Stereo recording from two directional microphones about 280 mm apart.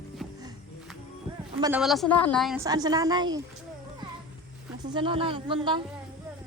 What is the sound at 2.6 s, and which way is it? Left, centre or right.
Speech, centre.